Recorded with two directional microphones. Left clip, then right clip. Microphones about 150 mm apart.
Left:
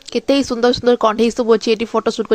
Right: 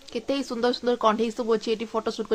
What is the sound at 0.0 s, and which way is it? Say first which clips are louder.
Speech: left 12 dB; 50° left (ahead or behind).